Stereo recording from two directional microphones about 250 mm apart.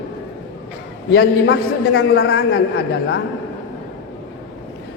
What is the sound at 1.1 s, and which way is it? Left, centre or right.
A woman's voice, left.